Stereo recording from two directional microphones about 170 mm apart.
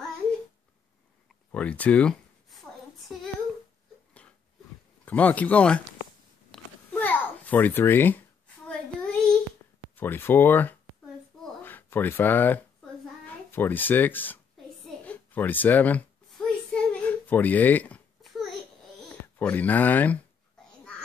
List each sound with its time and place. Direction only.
1.5 s speech: 5° left (ahead or behind)
5.0 s speech: 10° left (ahead or behind)
6.5 s babbling: 10° left (ahead or behind)
8.6 s child singing: 5° left (ahead or behind)
9.9 s a child's voice: 10° left (ahead or behind)
15.0 s a sound: 10° left (ahead or behind)
19.3 s speech: 10° left (ahead or behind)